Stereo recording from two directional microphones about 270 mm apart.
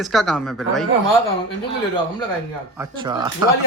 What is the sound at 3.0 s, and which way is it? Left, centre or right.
Speech, centre.